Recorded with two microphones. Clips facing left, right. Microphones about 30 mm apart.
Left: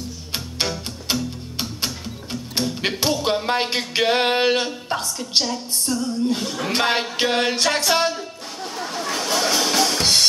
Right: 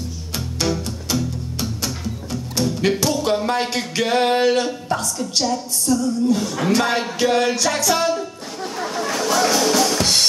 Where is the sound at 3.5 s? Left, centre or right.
Left.